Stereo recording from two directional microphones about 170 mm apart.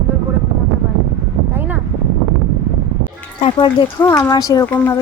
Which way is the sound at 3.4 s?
30° left (ahead or behind).